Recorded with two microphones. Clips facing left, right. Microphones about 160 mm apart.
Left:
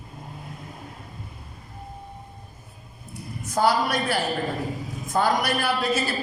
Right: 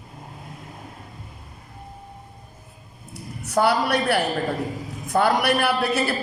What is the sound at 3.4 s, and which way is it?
A man's voice, 65° right (ahead or behind).